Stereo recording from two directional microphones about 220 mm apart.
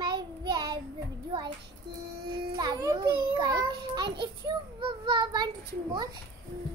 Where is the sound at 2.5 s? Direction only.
20° right (ahead or behind).